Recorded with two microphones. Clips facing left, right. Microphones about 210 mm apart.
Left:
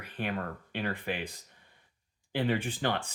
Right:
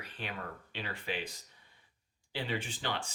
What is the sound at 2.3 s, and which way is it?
Speech, 55° left (ahead or behind).